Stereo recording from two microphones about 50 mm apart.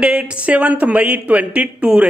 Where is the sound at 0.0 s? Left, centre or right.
Right.